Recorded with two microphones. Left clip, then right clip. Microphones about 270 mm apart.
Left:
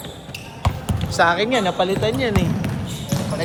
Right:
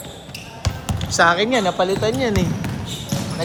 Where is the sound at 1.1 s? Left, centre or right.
Right.